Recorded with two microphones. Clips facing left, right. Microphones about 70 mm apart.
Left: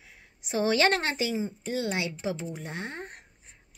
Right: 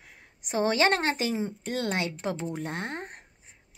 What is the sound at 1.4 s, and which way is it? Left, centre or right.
Speech, right.